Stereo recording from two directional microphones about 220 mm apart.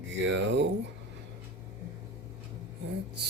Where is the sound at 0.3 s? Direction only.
55° right (ahead or behind).